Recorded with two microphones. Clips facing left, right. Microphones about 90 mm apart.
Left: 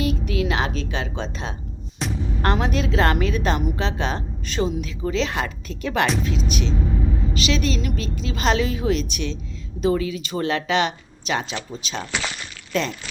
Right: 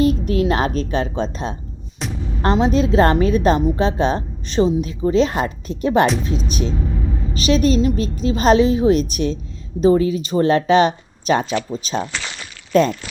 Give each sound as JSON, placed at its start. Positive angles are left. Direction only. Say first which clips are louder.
{"t": 0.0, "sound": "a woman's voice", "louder": "right 7 dB", "side_deg": -40}
{"t": 2.0, "sound": "music", "louder": "even", "side_deg": 0}
{"t": 2.4, "sound": "a woman's voice", "louder": "right 6 dB", "side_deg": -25}